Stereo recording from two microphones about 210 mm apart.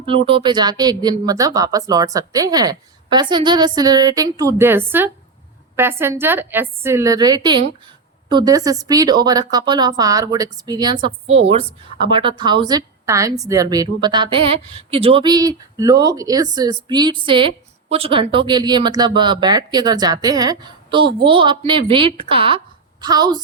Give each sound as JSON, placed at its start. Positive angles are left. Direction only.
{"t": 0.0, "sound": "a woman's voice", "side_deg": -25}